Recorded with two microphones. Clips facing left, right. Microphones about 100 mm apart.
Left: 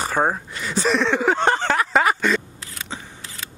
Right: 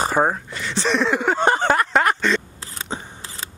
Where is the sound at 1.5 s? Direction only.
15° right (ahead or behind).